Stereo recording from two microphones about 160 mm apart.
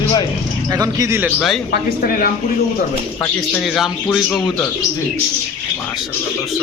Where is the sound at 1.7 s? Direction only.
65° left (ahead or behind).